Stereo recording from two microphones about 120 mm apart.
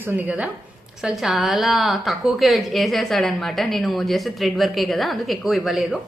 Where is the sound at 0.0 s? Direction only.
15° right (ahead or behind).